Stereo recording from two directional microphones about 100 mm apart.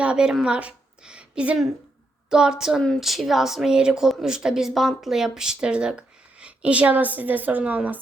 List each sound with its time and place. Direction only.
0.0 s a woman's voice: 10° right (ahead or behind)